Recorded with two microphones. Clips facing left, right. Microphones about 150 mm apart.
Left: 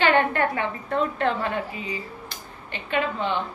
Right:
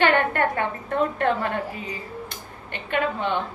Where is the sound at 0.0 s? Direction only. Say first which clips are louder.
Even; 50° right (ahead or behind).